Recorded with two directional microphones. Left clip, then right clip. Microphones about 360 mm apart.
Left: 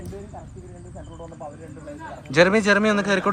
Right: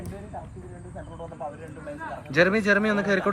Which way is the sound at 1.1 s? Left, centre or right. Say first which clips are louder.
Right 2 dB; right.